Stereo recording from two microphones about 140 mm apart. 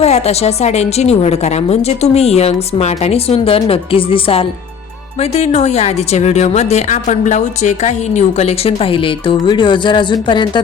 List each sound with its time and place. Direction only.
0.0 s a woman's voice: 50° left (ahead or behind)